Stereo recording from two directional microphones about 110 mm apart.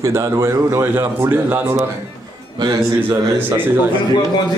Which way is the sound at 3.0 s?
20° right (ahead or behind).